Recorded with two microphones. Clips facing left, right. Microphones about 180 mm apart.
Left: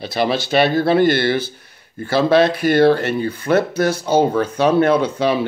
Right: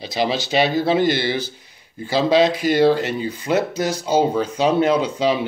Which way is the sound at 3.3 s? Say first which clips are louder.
Left 3 dB; 15° right (ahead or behind).